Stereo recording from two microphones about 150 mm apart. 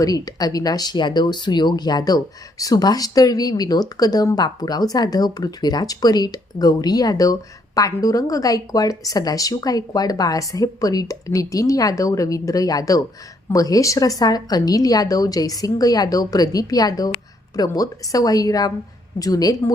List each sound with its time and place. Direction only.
0.0 s speech: 25° left (ahead or behind)